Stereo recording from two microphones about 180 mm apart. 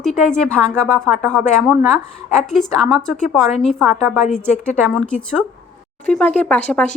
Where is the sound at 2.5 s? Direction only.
Centre (ahead or behind).